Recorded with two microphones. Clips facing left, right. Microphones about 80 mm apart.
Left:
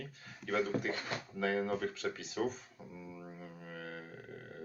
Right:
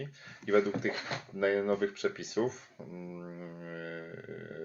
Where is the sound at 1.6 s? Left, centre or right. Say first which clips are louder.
Right 6 dB; right.